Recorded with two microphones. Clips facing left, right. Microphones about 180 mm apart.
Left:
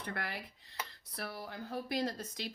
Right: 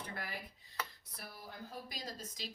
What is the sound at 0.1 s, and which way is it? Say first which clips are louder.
Speech: left 4 dB; 70° left (ahead or behind).